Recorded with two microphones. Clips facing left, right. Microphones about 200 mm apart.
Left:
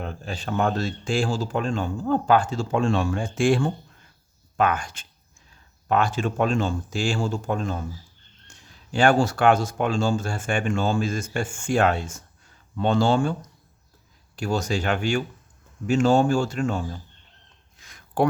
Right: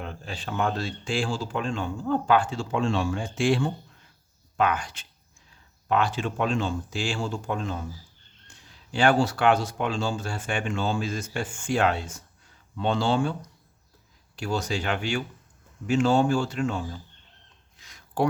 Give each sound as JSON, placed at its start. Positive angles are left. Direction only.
{"t": 0.0, "sound": "speech", "side_deg": 45}
{"t": 14.3, "sound": "speech", "side_deg": 45}
{"t": 17.7, "sound": "a sound", "side_deg": 50}